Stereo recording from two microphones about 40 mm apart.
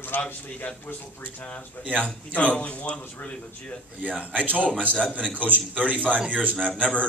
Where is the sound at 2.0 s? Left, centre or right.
Left.